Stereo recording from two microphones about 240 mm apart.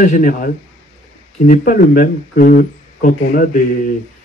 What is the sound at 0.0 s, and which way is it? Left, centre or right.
Speech, left.